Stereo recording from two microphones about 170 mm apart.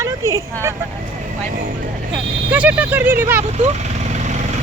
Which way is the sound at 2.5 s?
10° right (ahead or behind).